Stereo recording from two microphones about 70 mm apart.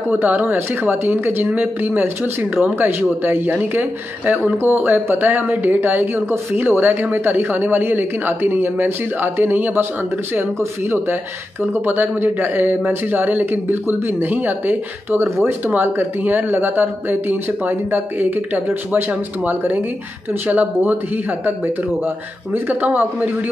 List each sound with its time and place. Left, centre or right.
0.1 s speech: right
10.6 s speech: right
22.0 s speech: right